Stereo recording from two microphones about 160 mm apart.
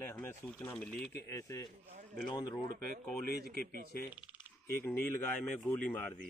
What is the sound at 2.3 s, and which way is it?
Speech, 30° left (ahead or behind).